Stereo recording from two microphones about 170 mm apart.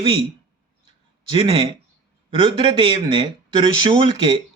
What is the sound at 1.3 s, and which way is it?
Speech, 30° right (ahead or behind).